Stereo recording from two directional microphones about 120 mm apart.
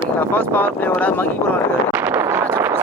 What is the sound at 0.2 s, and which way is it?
Speech, 15° left (ahead or behind).